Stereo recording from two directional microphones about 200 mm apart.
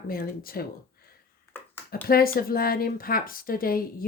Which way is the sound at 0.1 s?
45° left (ahead or behind).